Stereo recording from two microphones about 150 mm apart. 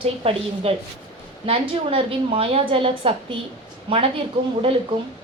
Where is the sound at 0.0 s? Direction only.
40° right (ahead or behind).